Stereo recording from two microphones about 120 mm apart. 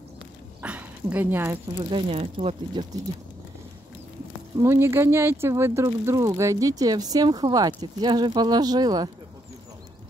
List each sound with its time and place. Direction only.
0.6 s dog: 15° right (ahead or behind)
1.8 s speech: 45° right (ahead or behind)
4.6 s speech: 20° right (ahead or behind); by 9.1 s 35° right (ahead or behind)